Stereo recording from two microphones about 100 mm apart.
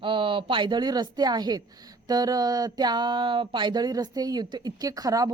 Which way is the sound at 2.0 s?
40° right (ahead or behind).